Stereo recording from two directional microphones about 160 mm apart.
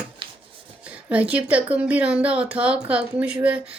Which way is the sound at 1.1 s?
10° right (ahead or behind).